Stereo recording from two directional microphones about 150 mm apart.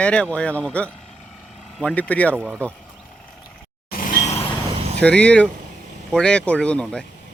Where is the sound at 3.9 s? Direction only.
70° left (ahead or behind).